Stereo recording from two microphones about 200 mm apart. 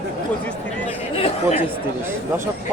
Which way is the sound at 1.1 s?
30° left (ahead or behind).